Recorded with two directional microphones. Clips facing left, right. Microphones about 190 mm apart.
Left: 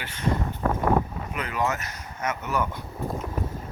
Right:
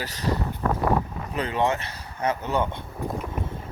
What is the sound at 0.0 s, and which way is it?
Speech, 40° right (ahead or behind).